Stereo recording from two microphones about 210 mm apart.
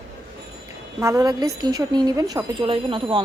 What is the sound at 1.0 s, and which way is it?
A woman's voice, 15° right (ahead or behind).